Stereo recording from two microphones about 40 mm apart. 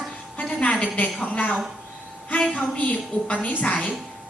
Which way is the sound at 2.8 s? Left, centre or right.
Left.